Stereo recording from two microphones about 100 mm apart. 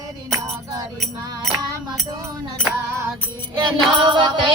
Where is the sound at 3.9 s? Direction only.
55° right (ahead or behind).